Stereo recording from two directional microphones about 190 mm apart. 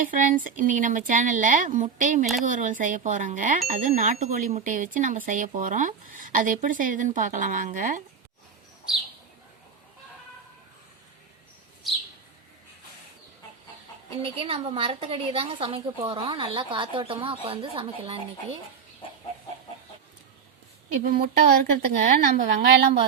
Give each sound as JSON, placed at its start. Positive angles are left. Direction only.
{"t": 0.0, "sound": "speech", "side_deg": -45}
{"t": 14.2, "sound": "a woman's voice", "side_deg": -30}
{"t": 21.0, "sound": "speech", "side_deg": -50}